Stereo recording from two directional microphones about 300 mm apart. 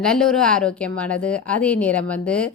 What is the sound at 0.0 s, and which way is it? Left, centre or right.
A woman's voice, centre.